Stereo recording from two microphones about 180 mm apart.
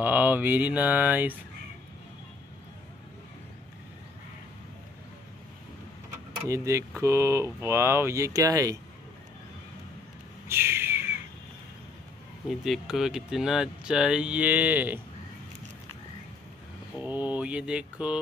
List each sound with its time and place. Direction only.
0.0 s speech: 10° right (ahead or behind)
6.5 s speech: 15° right (ahead or behind)
10.5 s a sound: 15° right (ahead or behind)
12.4 s speech: centre (ahead or behind)
17.0 s mantra: 10° right (ahead or behind)